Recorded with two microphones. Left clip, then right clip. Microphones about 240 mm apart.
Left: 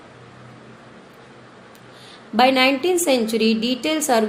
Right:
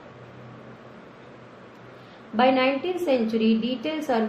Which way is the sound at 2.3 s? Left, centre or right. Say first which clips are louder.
Left 5 dB; left.